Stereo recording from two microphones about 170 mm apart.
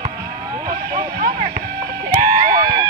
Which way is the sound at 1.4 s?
25° right (ahead or behind).